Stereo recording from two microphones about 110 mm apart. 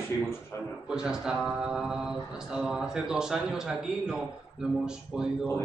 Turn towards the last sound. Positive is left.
turn(degrees=-5)  # may be behind; listen again after turning